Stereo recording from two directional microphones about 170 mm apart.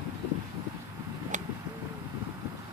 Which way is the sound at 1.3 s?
45° right (ahead or behind).